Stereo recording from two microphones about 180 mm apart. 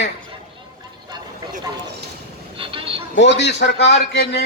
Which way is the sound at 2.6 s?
30° right (ahead or behind).